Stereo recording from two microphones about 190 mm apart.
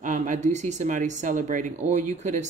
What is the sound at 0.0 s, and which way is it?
Speech, 40° right (ahead or behind).